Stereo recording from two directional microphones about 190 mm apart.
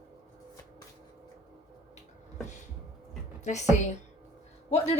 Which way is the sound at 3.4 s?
40° left (ahead or behind).